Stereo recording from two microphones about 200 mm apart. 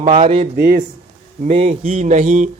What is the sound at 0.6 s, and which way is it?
Mantra, 45° right (ahead or behind).